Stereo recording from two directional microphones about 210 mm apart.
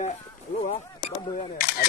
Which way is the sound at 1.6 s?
45° left (ahead or behind).